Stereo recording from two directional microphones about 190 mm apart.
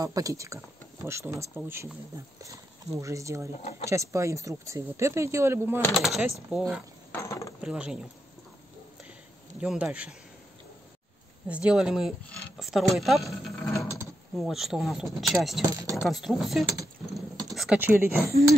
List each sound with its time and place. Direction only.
0.0 s speech: 20° right (ahead or behind)
5.9 s speech: centre (ahead or behind)
7.1 s mechanisms: 15° left (ahead or behind)
7.6 s speech: 5° right (ahead or behind)
9.6 s speech: 5° right (ahead or behind)
11.4 s speech: 5° right (ahead or behind)
15.7 s speech: 20° right (ahead or behind)
16.0 s speech: centre (ahead or behind)